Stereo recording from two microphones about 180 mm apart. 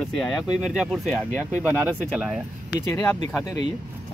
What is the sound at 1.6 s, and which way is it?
Speech, 5° right (ahead or behind).